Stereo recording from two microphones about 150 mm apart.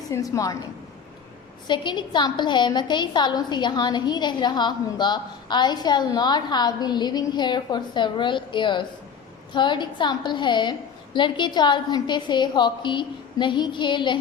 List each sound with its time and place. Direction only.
0.1 s a woman's voice: 20° left (ahead or behind)
1.6 s a woman's voice: 30° left (ahead or behind)